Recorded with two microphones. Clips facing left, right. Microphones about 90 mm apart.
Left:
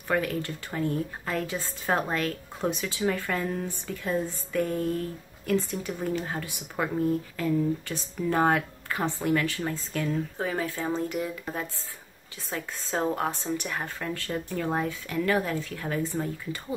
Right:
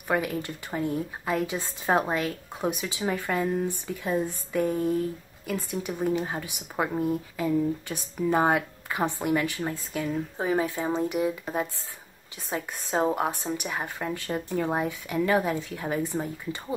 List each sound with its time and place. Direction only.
0.1 s speech: 15° right (ahead or behind)
12.4 s speech: 20° right (ahead or behind)